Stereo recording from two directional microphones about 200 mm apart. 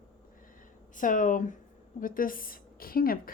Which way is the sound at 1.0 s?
40° left (ahead or behind).